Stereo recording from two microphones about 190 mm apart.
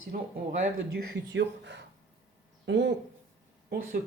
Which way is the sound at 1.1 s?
70° right (ahead or behind).